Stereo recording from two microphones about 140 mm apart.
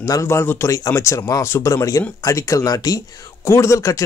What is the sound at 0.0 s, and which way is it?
Speech, 20° left (ahead or behind).